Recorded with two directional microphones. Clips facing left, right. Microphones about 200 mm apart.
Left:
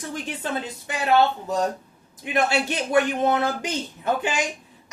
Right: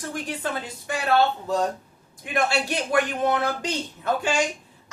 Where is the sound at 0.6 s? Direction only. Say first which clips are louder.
Even; 20° left (ahead or behind).